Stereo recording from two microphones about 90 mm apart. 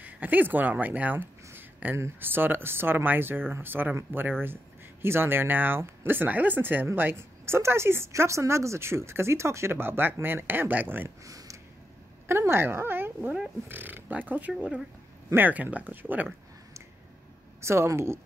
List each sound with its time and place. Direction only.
0.0 s speech: 20° right (ahead or behind)
11.2 s a sound: 35° right (ahead or behind)
12.3 s speech: 25° right (ahead or behind)
17.6 s speech: 30° right (ahead or behind)